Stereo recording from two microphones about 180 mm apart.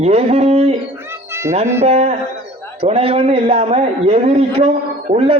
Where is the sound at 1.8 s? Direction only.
35° right (ahead or behind).